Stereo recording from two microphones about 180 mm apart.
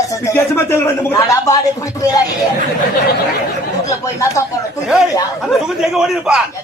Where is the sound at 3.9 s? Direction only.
15° left (ahead or behind).